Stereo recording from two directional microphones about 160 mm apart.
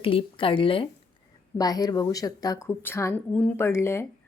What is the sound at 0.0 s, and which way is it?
Speech, 35° left (ahead or behind).